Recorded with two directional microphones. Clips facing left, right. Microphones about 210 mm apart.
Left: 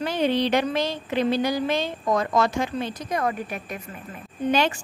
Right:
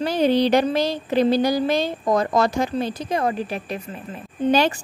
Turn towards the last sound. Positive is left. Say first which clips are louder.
# right 4 dB
turn(degrees=-35)  # may be behind; listen again after turning